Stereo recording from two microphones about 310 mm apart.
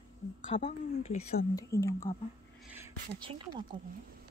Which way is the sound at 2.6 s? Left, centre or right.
Centre.